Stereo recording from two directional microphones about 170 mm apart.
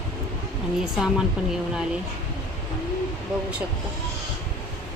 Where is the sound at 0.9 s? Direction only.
5° right (ahead or behind).